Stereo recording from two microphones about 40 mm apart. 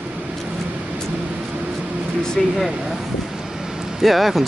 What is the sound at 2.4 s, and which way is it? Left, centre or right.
Speech, centre.